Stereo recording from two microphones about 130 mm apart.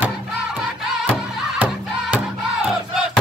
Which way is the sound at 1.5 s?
10° right (ahead or behind).